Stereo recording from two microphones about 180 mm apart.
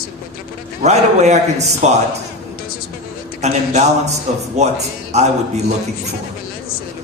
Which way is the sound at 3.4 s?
40° right (ahead or behind).